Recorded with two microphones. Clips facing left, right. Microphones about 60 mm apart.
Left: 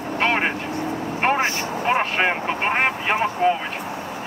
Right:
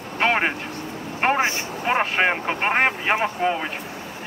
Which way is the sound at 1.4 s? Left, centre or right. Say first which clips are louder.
Even; right.